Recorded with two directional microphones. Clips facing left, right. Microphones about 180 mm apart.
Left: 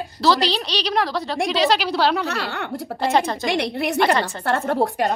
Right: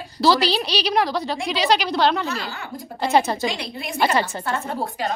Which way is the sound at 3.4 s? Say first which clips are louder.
Left 5 dB; 65° left (ahead or behind).